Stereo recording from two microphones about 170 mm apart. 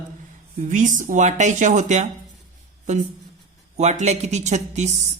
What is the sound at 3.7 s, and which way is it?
A woman's voice, 40° right (ahead or behind).